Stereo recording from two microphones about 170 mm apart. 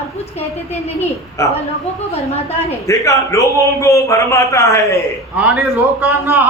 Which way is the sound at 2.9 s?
15° left (ahead or behind).